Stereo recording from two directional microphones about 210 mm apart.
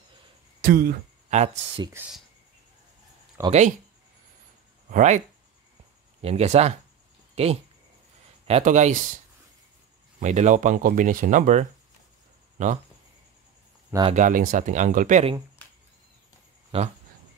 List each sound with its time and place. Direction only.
0.6 s speech: 45° right (ahead or behind)
1.3 s speech: 30° right (ahead or behind)
3.4 s speech: 10° right (ahead or behind)
4.9 s speech: 35° right (ahead or behind)
6.2 s speech: 30° right (ahead or behind)
10.2 s speech: 35° right (ahead or behind)
14.0 s speech: 35° right (ahead or behind)
16.7 s speech: 25° right (ahead or behind)